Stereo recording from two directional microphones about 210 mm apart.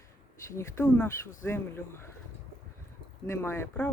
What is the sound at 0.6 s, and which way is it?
Speech, 10° left (ahead or behind).